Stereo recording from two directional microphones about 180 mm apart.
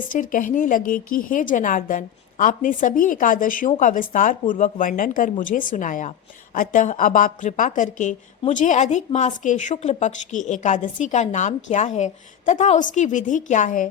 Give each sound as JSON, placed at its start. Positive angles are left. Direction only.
{"t": 0.0, "sound": "a woman's voice", "side_deg": 50}